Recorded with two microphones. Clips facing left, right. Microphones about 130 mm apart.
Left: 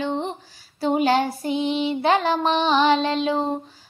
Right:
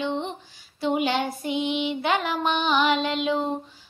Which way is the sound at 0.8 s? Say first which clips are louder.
Left 4 dB; 40° left (ahead or behind).